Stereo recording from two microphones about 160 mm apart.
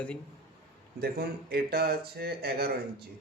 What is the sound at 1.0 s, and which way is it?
Speech, 75° right (ahead or behind).